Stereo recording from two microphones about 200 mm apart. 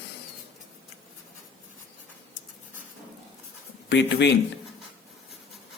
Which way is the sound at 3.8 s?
60° left (ahead or behind).